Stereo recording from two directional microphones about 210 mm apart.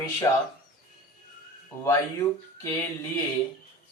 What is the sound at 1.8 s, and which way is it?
Speech, 15° left (ahead or behind).